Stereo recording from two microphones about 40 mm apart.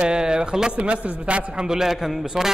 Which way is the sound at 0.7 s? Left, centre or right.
Right.